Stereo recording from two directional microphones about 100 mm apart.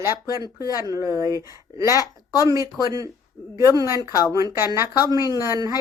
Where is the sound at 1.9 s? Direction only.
40° left (ahead or behind).